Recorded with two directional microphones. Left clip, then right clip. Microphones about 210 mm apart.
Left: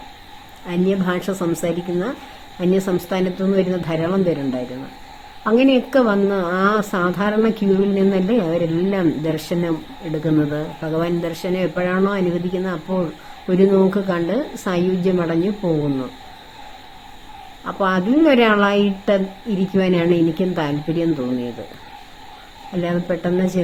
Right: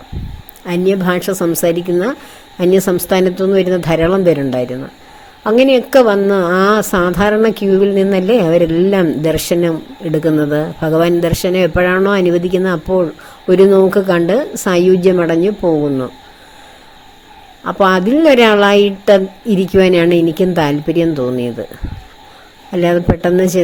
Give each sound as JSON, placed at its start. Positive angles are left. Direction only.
{"t": 0.6, "sound": "a woman's voice", "side_deg": -40}
{"t": 17.6, "sound": "a woman's voice", "side_deg": -40}
{"t": 22.7, "sound": "a woman's voice", "side_deg": -40}